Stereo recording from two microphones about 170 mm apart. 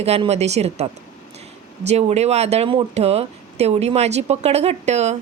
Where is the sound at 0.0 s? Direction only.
35° right (ahead or behind).